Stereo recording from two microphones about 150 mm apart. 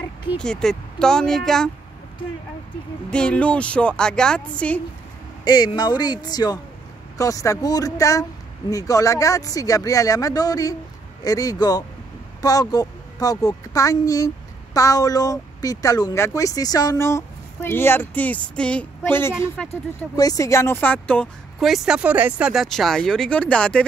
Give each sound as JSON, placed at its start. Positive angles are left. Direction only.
{"t": 0.4, "sound": "speech", "side_deg": 5}
{"t": 3.1, "sound": "a woman's voice", "side_deg": 5}
{"t": 5.4, "sound": "a woman's voice", "side_deg": 30}
{"t": 20.2, "sound": "speech", "side_deg": 25}